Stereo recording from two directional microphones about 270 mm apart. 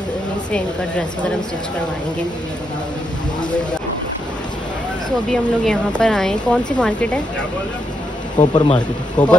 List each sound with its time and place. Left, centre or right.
5.3 s speech: centre
8.5 s speech: centre
9.2 s speech: centre